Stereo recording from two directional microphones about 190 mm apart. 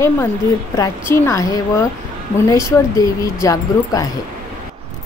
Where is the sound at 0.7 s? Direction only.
15° left (ahead or behind).